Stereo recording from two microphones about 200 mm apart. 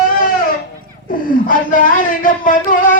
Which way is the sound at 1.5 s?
40° left (ahead or behind).